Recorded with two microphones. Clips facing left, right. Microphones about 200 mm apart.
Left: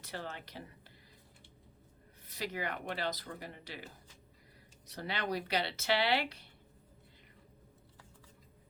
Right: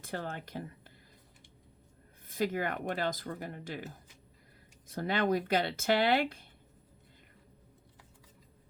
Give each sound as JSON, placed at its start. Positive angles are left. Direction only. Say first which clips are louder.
{"t": 0.0, "sound": "speech", "louder": "right 5 dB", "side_deg": -50}
{"t": 2.2, "sound": "speech", "louder": "right 7 dB", "side_deg": -50}